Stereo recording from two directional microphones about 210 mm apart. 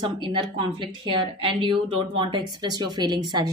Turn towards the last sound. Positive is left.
turn(degrees=-20)  # may be behind; listen again after turning